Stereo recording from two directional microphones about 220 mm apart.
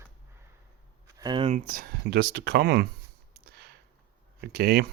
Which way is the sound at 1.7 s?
40° right (ahead or behind).